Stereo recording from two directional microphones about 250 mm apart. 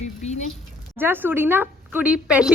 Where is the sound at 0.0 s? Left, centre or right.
Left.